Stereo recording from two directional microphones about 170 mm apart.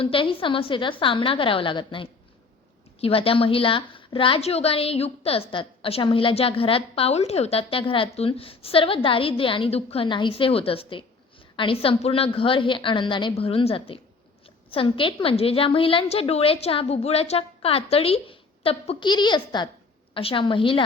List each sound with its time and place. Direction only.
0.0 s a woman's voice: 30° left (ahead or behind)